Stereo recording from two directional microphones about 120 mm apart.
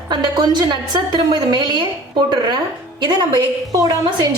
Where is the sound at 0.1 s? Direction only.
40° right (ahead or behind).